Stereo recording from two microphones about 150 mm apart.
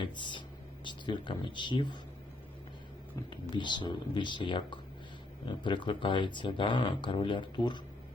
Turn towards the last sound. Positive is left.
turn(degrees=30)  # may be behind; listen again after turning